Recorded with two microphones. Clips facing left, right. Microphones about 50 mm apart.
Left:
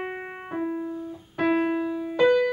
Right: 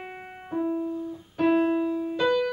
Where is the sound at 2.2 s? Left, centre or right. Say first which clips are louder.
Left 5 dB; left.